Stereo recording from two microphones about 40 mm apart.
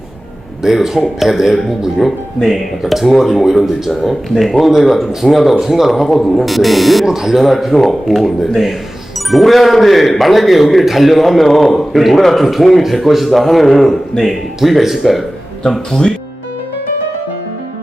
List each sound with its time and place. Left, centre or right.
0.6 s a man's voice: centre
15.9 s speech: centre